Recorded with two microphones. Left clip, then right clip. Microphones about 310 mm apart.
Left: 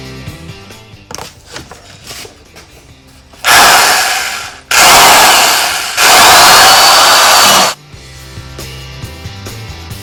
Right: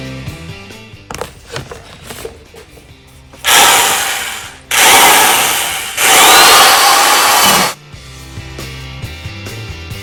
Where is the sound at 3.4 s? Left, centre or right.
Left.